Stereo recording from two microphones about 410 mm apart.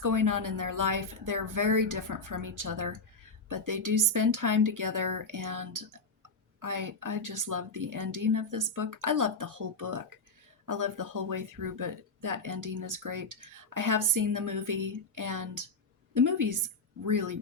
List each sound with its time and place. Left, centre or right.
0.0 s a woman's voice: right